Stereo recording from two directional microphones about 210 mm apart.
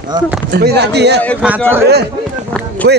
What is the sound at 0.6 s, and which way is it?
Speech, 50° right (ahead or behind).